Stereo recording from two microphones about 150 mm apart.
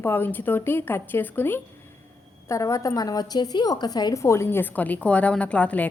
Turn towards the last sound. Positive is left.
turn(degrees=10)  # may be behind; listen again after turning